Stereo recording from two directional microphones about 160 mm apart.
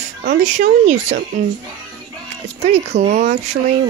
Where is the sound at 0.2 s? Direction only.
55° right (ahead or behind).